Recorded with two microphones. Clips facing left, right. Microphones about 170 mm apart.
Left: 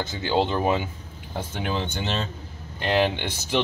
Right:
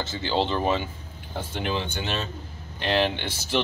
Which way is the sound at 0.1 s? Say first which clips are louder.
Left 2 dB; 5° left (ahead or behind).